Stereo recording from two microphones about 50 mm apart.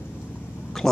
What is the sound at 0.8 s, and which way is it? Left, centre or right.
Speech, centre.